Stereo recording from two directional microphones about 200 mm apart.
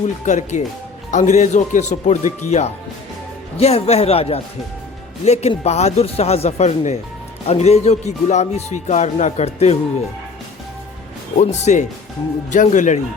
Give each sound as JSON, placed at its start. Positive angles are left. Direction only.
{"t": 0.3, "sound": "speech", "side_deg": 40}
{"t": 11.3, "sound": "speech", "side_deg": 35}